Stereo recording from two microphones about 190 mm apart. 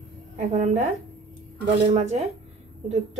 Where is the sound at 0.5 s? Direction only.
35° right (ahead or behind).